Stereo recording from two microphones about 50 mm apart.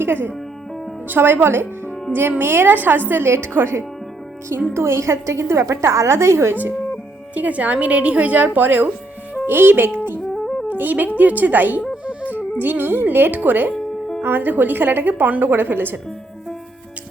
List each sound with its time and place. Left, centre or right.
0.0 s a woman's voice: right
3.2 s a woman's voice: right
6.5 s a woman's voice: right
7.3 s a woman's voice: right
10.2 s music: centre
10.7 s a woman's voice: right